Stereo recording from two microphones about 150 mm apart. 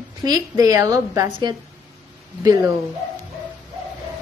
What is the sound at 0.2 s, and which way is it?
A woman's voice, 25° right (ahead or behind).